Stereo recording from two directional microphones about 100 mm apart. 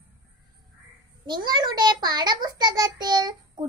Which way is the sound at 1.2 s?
45° right (ahead or behind).